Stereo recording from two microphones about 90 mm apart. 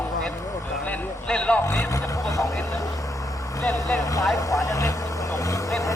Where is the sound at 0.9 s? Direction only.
10° left (ahead or behind).